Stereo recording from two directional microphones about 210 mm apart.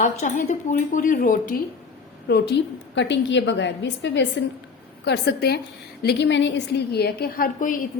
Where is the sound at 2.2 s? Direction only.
50° left (ahead or behind).